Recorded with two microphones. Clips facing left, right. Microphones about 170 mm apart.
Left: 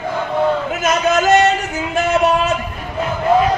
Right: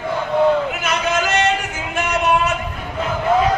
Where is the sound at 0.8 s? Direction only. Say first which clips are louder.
Left 5 dB; 40° left (ahead or behind).